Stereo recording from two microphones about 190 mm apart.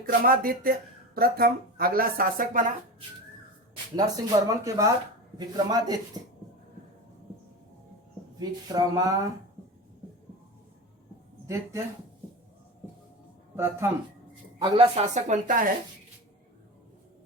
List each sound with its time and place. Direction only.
0.1 s speech: 50° right (ahead or behind)
3.9 s speech: 20° right (ahead or behind)
8.4 s speech: 20° right (ahead or behind)
11.4 s speech: 15° right (ahead or behind)
13.6 s speech: 15° right (ahead or behind)
14.6 s speech: 30° right (ahead or behind)